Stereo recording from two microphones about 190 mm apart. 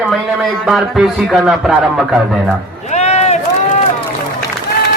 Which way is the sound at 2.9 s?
35° left (ahead or behind).